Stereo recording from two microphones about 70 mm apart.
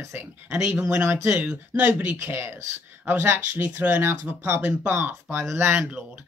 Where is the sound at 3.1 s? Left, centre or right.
Right.